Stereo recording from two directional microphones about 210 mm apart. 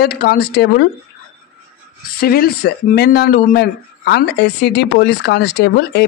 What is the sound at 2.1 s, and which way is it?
Speech, 45° left (ahead or behind).